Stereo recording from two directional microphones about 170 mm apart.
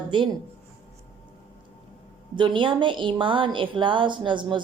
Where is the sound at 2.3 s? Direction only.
30° right (ahead or behind).